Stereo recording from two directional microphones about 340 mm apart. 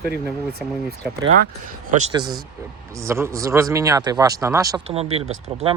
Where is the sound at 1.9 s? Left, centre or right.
Centre.